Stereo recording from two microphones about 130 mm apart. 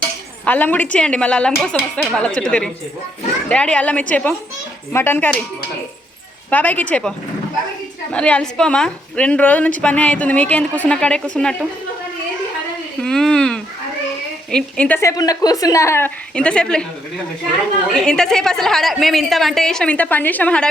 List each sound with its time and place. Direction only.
0.4 s a woman's voice: 10° left (ahead or behind)
6.5 s a woman's voice: 15° left (ahead or behind)
8.1 s a woman's voice: 10° left (ahead or behind)
13.0 s a woman's voice: 5° left (ahead or behind)
15.1 s a woman's voice: 30° left (ahead or behind); by 16.8 s 5° left (ahead or behind)
18.0 s a woman's voice: 5° left (ahead or behind)